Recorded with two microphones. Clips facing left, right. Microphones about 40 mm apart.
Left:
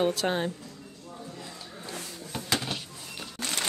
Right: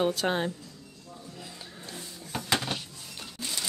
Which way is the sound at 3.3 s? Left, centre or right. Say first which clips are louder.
Left 3 dB; left.